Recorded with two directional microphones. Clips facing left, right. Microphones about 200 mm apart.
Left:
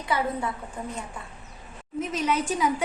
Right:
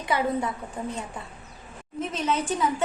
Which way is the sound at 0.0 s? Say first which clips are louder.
Right 2 dB; 20° right (ahead or behind).